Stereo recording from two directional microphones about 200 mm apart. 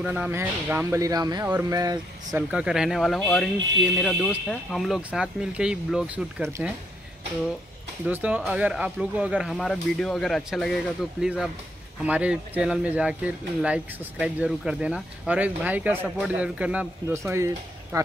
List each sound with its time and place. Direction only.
0.0 s speech: 5° right (ahead or behind)
2.5 s speech: 5° right (ahead or behind)
8.1 s speech: 5° right (ahead or behind)